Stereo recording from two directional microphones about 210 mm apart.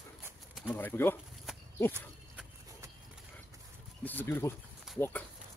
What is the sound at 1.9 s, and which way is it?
Livestock, 10° right (ahead or behind).